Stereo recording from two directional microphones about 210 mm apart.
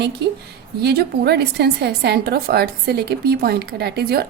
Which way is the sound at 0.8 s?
50° right (ahead or behind).